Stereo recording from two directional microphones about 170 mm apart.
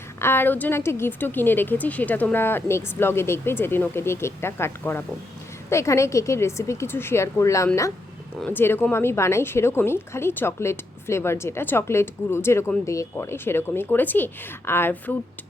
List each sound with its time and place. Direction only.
0.2 s a woman's voice: 15° left (ahead or behind)